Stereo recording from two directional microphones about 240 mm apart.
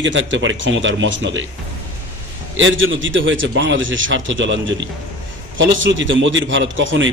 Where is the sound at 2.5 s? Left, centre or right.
Right.